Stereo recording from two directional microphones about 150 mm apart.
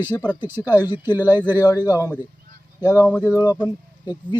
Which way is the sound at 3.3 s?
25° left (ahead or behind).